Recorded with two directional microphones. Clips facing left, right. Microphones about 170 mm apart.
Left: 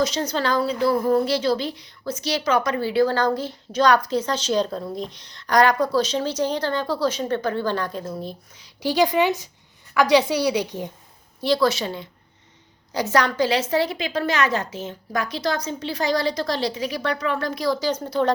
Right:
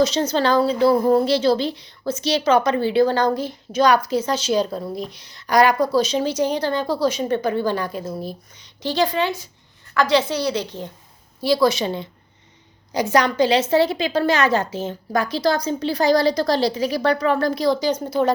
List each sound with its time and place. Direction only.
0.0 s a woman's voice: 25° right (ahead or behind); by 10.9 s 15° left (ahead or behind)
11.3 s a woman's voice: 5° right (ahead or behind)
11.7 s a woman's voice: 20° right (ahead or behind)
18.0 s a woman's voice: 10° right (ahead or behind)